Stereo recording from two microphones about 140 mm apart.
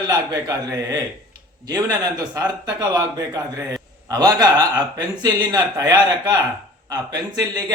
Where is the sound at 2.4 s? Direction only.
30° right (ahead or behind).